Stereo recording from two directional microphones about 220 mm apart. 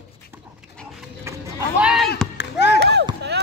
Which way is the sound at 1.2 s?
10° right (ahead or behind).